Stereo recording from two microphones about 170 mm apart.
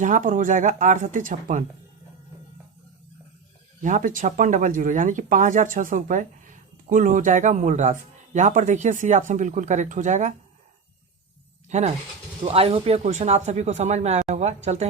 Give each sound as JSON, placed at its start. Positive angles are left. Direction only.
{"t": 0.0, "sound": "speech", "side_deg": -50}
{"t": 3.8, "sound": "speech", "side_deg": -50}
{"t": 11.7, "sound": "speech", "side_deg": -40}